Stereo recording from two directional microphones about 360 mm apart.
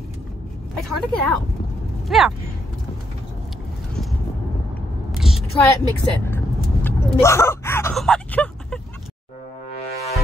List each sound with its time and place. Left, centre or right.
0.7 s a woman's voice: centre
5.1 s a sound: centre
5.5 s speech: centre
9.8 s music: centre